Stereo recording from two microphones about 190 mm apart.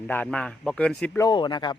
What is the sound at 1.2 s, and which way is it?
Speech, 25° left (ahead or behind).